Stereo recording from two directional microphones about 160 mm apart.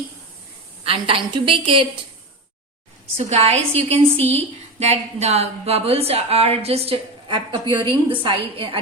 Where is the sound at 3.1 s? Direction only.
40° right (ahead or behind).